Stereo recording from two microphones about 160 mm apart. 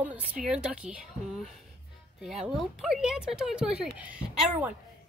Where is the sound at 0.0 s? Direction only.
10° right (ahead or behind).